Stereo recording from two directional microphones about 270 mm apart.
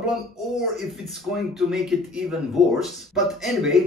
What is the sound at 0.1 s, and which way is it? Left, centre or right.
Speech, centre.